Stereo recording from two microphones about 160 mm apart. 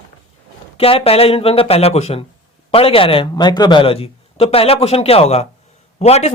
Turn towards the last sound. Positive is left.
turn(degrees=40)  # may be behind; listen again after turning